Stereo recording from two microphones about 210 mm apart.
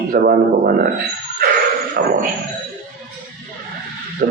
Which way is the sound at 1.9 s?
45° right (ahead or behind).